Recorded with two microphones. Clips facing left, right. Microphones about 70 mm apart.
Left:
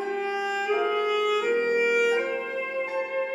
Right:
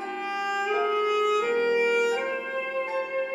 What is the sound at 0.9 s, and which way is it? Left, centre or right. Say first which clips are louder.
Clarinet: right 1 dB; centre.